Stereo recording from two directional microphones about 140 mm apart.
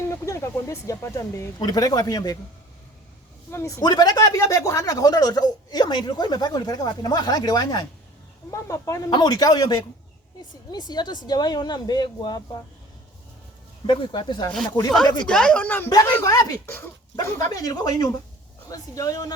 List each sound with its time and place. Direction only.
0.0 s speech: 20° left (ahead or behind)
3.5 s speech: 20° left (ahead or behind)
13.8 s speech: 35° left (ahead or behind)
15.3 s speech: 5° left (ahead or behind)
16.2 s speech: 25° left (ahead or behind)